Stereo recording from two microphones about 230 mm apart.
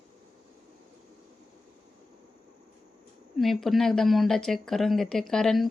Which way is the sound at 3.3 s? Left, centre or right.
Centre.